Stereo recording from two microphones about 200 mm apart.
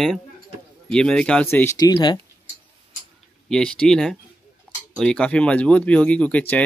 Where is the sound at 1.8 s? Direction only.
20° left (ahead or behind).